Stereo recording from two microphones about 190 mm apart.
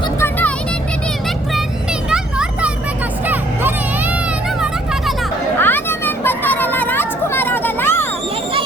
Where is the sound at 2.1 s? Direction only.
5° right (ahead or behind).